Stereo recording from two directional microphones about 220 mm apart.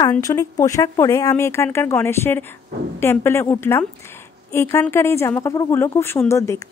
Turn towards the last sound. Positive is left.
turn(degrees=15)  # may be behind; listen again after turning